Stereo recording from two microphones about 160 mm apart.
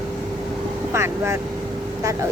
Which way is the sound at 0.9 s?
15° right (ahead or behind).